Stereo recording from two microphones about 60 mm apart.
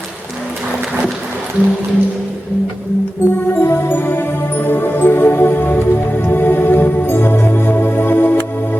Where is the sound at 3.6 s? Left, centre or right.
Left.